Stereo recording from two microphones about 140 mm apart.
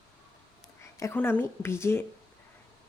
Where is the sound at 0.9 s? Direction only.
15° left (ahead or behind).